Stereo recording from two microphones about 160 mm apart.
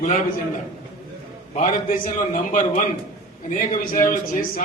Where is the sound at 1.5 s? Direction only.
55° left (ahead or behind).